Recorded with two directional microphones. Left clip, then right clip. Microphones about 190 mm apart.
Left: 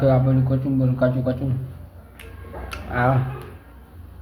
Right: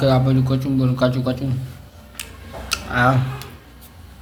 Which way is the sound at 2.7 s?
5° right (ahead or behind).